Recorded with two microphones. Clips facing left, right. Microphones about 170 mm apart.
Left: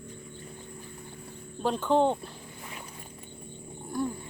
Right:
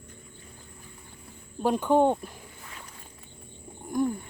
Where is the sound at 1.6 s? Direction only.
10° right (ahead or behind).